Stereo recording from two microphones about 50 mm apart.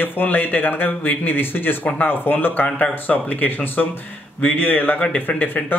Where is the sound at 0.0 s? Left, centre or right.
Left.